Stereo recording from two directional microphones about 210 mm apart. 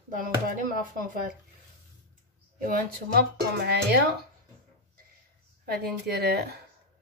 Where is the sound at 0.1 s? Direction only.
40° right (ahead or behind).